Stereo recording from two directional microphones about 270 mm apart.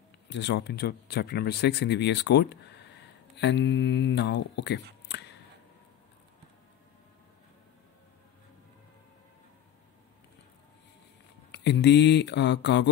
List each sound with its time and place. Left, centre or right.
0.3 s speech: left
5.0 s a sound: left
11.5 s speech: left